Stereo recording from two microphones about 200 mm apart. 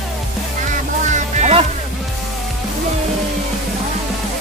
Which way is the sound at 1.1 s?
35° right (ahead or behind).